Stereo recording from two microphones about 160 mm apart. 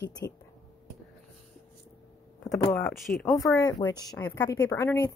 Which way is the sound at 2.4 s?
20° left (ahead or behind).